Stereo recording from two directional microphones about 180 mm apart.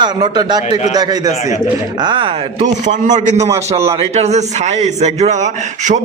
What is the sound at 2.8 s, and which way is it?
Speech, 45° right (ahead or behind).